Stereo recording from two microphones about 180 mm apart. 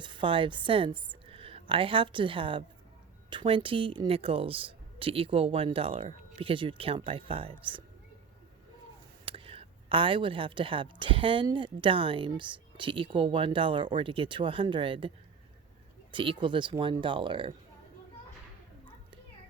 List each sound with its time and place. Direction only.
0.0 s a woman's voice: 25° right (ahead or behind)
9.2 s a woman's voice: 30° right (ahead or behind)
16.1 s a woman's voice: 30° right (ahead or behind)